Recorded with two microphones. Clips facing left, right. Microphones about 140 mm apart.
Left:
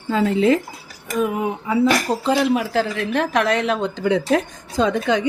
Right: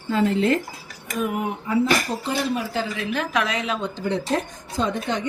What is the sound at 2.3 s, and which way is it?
A woman's voice, 85° left.